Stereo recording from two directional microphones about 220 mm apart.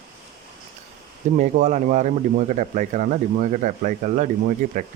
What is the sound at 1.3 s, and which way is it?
Speech, 35° right (ahead or behind).